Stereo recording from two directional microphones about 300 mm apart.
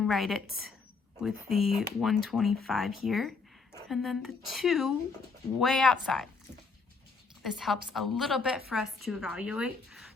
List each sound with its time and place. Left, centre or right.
0.0 s a woman's voice: centre
7.4 s a woman's voice: centre